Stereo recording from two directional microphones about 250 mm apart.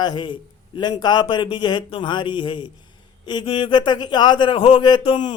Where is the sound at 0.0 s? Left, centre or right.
Centre.